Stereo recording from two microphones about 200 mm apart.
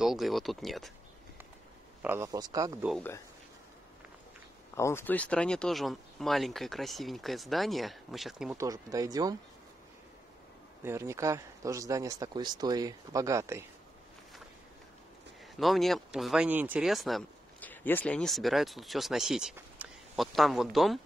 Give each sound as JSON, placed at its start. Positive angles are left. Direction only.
{"t": 0.0, "sound": "speech", "side_deg": 0}
{"t": 2.0, "sound": "speech", "side_deg": -15}
{"t": 4.7, "sound": "speech", "side_deg": 15}
{"t": 8.5, "sound": "speech", "side_deg": -15}
{"t": 10.8, "sound": "speech", "side_deg": -15}
{"t": 15.6, "sound": "speech", "side_deg": 0}